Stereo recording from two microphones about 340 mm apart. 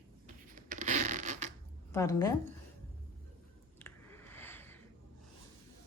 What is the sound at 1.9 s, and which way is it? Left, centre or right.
Speech, centre.